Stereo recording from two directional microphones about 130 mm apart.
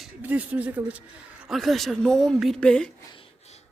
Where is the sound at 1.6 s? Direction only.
Centre (ahead or behind).